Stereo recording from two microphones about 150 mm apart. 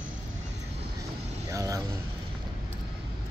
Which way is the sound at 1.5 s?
20° right (ahead or behind).